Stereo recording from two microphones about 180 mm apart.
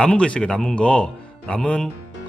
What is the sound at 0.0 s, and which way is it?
Speech, 5° left (ahead or behind).